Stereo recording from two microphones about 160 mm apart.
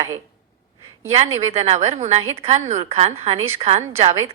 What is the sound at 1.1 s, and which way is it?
A woman's voice, 40° right (ahead or behind).